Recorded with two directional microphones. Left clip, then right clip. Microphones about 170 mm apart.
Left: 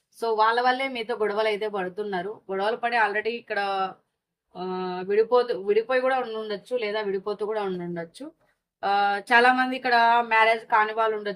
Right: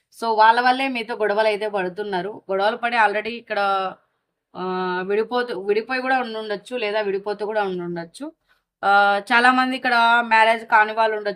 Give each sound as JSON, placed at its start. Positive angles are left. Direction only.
{"t": 0.2, "sound": "speech", "side_deg": -55}